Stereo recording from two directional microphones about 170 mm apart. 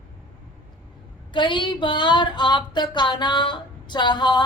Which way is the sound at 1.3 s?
30° left (ahead or behind).